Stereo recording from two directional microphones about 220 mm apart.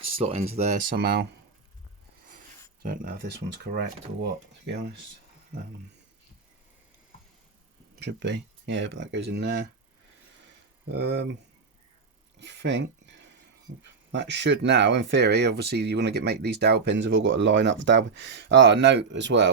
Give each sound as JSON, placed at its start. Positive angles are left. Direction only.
{"t": 0.0, "sound": "speech", "side_deg": -25}
{"t": 2.8, "sound": "speech", "side_deg": -40}
{"t": 7.9, "sound": "speech", "side_deg": -50}
{"t": 10.9, "sound": "speech", "side_deg": -50}
{"t": 12.4, "sound": "speech", "side_deg": -50}